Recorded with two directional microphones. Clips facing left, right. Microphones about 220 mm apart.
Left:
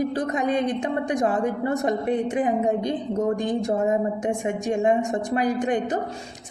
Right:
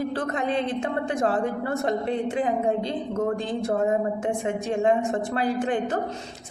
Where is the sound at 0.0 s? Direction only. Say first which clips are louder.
Left 3 dB; 15° left (ahead or behind).